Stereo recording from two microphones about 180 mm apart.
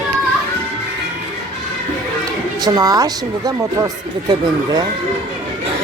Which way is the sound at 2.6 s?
20° right (ahead or behind).